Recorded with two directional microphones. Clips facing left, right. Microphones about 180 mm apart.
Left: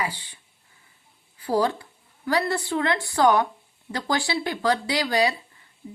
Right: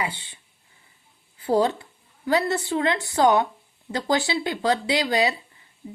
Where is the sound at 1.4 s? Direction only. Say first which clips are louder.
Right 2 dB; 25° right (ahead or behind).